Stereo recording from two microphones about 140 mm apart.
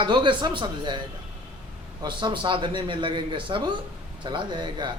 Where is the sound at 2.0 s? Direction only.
35° right (ahead or behind).